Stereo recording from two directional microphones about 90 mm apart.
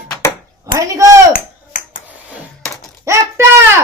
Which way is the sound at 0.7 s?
40° right (ahead or behind).